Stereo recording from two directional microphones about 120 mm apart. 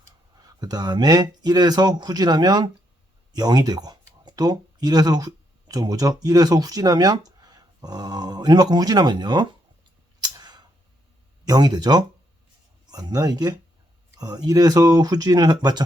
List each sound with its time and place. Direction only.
0.0 s speech: 30° right (ahead or behind)
10.2 s a sound: 35° right (ahead or behind)
11.4 s speech: 35° right (ahead or behind)